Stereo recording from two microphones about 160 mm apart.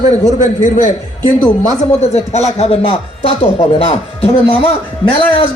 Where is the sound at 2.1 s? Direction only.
45° left (ahead or behind).